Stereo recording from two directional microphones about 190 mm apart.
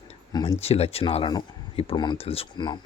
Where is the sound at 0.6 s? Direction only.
30° left (ahead or behind).